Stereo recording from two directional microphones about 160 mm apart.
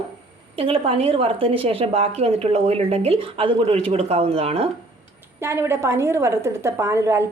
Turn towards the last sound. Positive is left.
turn(degrees=-15)  # may be behind; listen again after turning